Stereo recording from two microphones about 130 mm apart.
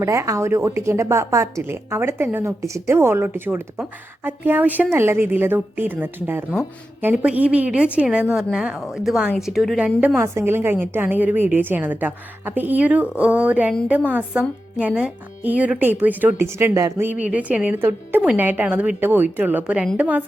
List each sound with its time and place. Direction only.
0.0 s a woman's voice: 25° right (ahead or behind); by 10.1 s 5° right (ahead or behind)
10.2 s a woman's voice: 20° right (ahead or behind)